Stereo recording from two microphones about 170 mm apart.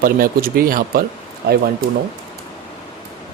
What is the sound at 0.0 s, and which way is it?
Speech, 60° right (ahead or behind).